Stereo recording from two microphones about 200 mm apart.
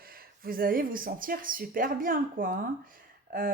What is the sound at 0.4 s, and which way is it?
Speech, 45° right (ahead or behind).